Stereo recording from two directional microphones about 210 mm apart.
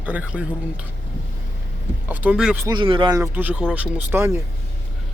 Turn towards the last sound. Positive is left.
turn(degrees=-10)  # may be behind; listen again after turning